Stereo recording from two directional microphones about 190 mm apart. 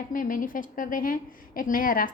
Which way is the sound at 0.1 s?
45° left (ahead or behind).